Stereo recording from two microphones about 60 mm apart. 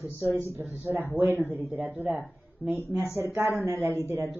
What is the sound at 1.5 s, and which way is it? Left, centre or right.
A man's voice, right.